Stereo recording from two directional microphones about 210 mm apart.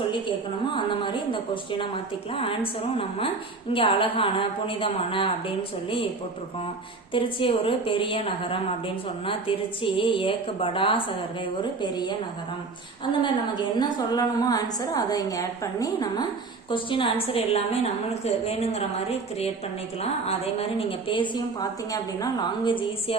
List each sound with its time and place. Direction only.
0.1 s a woman's voice: 25° left (ahead or behind)
7.1 s a woman's voice: 25° left (ahead or behind)
13.7 s a woman's voice: 20° left (ahead or behind)